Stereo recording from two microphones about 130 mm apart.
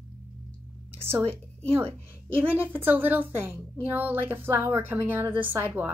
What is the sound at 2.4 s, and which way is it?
A woman's voice, 15° right (ahead or behind).